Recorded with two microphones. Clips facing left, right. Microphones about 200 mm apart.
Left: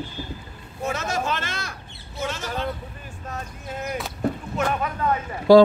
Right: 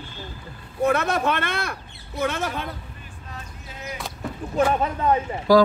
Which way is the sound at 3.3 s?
50° left (ahead or behind).